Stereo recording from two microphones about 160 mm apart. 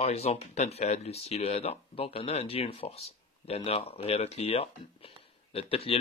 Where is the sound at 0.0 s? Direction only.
40° left (ahead or behind).